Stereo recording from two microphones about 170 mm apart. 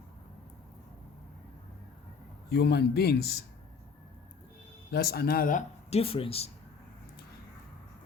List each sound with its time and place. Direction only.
2.5 s a man's voice: 70° left (ahead or behind)
4.9 s speech: 65° left (ahead or behind); by 6.5 s 35° left (ahead or behind)